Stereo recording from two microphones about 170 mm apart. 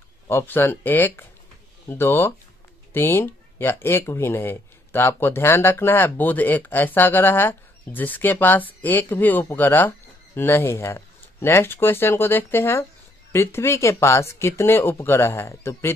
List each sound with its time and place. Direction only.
0.3 s speech: 10° left (ahead or behind)